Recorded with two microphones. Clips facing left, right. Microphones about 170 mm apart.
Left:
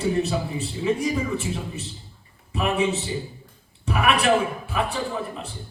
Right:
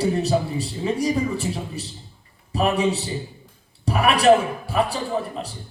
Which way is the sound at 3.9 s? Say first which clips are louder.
Right 4 dB; 35° right (ahead or behind).